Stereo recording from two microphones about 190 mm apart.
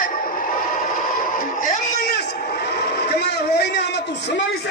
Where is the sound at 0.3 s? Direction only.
45° left (ahead or behind).